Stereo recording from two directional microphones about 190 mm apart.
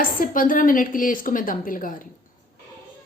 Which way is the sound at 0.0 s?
50° left (ahead or behind).